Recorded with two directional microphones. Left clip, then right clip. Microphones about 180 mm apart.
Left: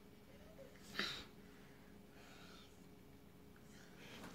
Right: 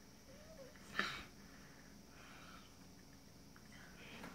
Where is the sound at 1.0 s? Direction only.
Centre (ahead or behind).